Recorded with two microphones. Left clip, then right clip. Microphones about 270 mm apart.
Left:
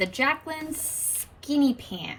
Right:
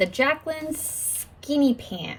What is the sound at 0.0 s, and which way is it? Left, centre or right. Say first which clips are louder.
A child's voice: right 3 dB; right.